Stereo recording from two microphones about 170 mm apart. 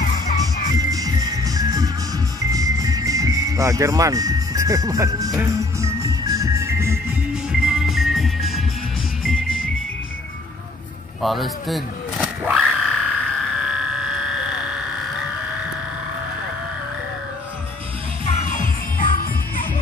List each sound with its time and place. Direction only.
0.0 s music: 50° left (ahead or behind)
0.7 s music: 20° right (ahead or behind)
7.6 s music: centre (ahead or behind)
11.2 s a sound: centre (ahead or behind)
18.2 s music: 45° left (ahead or behind)